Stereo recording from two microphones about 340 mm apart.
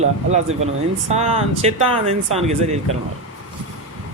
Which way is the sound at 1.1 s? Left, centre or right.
Centre.